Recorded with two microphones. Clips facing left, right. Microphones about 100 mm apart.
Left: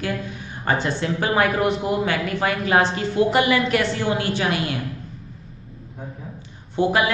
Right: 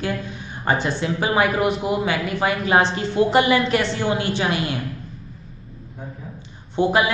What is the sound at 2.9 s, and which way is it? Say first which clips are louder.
A man's voice: right 1 dB; 30° right (ahead or behind).